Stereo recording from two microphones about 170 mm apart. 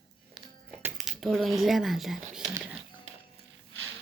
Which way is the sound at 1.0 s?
Centre (ahead or behind).